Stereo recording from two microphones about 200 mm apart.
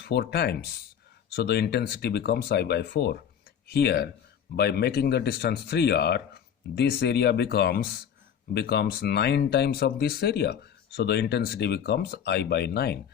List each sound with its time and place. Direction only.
0.0 s speech: 55° left (ahead or behind)